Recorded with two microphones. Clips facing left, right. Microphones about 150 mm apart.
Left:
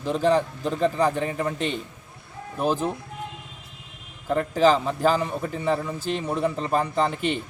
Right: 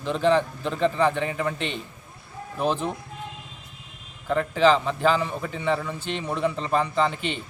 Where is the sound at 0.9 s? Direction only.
40° left (ahead or behind).